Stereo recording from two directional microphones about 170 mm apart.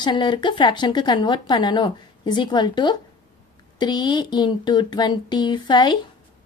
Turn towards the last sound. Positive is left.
turn(degrees=25)  # may be behind; listen again after turning